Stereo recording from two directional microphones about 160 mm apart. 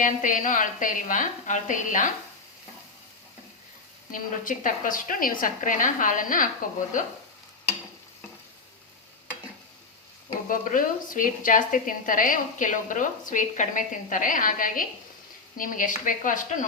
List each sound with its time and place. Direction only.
0.0 s a woman's voice: 55° left (ahead or behind)
4.1 s a woman's voice: 55° left (ahead or behind)
10.5 s a woman's voice: 55° left (ahead or behind)